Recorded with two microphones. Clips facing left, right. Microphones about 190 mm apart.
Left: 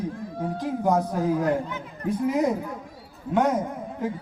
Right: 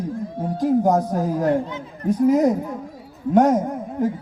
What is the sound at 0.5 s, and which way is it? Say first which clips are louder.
Music: right 6 dB; 45° right (ahead or behind).